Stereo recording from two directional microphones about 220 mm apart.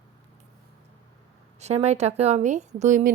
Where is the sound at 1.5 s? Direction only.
30° right (ahead or behind).